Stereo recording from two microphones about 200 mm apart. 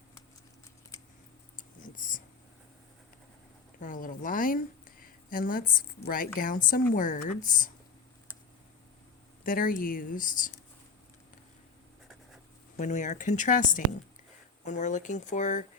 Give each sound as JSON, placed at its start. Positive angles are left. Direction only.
{"t": 1.8, "sound": "a sound", "side_deg": 40}
{"t": 3.8, "sound": "speech", "side_deg": 40}
{"t": 9.4, "sound": "speech", "side_deg": 45}
{"t": 12.7, "sound": "speech", "side_deg": 35}